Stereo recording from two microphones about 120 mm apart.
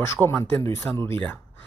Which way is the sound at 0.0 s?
20° left (ahead or behind).